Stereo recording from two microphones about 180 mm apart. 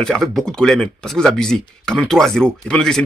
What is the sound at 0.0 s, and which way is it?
Speech, centre (ahead or behind).